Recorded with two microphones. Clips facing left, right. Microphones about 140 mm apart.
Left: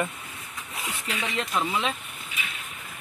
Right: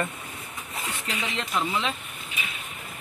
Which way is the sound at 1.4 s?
5° left (ahead or behind).